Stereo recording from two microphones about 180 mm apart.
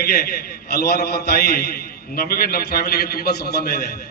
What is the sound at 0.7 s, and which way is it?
A man's voice, 60° left (ahead or behind).